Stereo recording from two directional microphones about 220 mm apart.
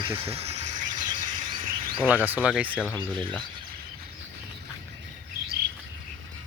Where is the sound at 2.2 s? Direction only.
5° right (ahead or behind).